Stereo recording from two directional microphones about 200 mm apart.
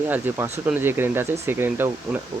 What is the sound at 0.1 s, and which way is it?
Speech, 10° right (ahead or behind).